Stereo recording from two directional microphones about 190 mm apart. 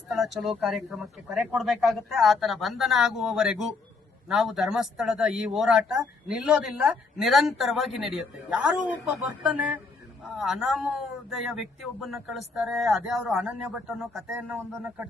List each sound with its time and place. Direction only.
0.1 s speech: centre (ahead or behind)